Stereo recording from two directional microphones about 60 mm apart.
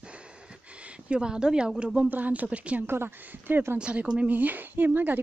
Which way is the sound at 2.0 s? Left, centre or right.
Right.